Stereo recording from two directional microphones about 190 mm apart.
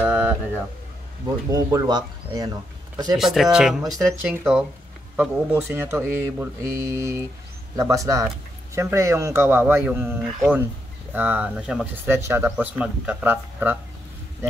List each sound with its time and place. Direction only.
0.0 s a sound: 5° right (ahead or behind)
1.5 s speech: 20° right (ahead or behind)
3.2 s speech: centre (ahead or behind)